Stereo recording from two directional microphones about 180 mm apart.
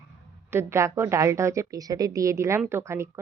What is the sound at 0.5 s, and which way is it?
A woman's voice, 15° right (ahead or behind).